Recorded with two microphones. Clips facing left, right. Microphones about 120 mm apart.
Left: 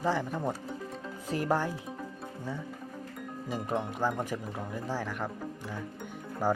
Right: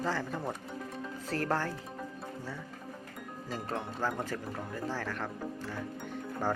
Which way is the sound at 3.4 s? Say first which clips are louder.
Left 4 dB; 15° left (ahead or behind).